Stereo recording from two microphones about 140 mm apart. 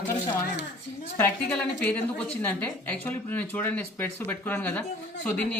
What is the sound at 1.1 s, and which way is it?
Speech, 15° left (ahead or behind).